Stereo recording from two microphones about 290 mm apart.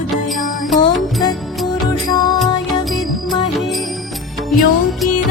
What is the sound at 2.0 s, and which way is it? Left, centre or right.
Music, centre.